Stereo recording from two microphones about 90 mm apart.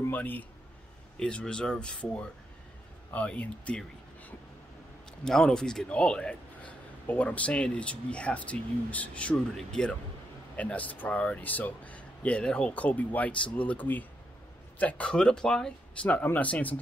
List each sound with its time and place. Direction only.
0.0 s a man's voice: 20° left (ahead or behind)
1.2 s speech: 10° left (ahead or behind)
5.2 s speech: 5° left (ahead or behind)